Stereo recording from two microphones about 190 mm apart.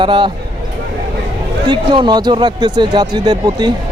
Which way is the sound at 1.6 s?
25° right (ahead or behind).